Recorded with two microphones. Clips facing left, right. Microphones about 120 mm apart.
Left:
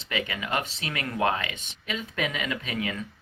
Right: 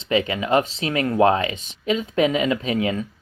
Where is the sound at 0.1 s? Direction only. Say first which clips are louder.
Right 10 dB; 30° right (ahead or behind).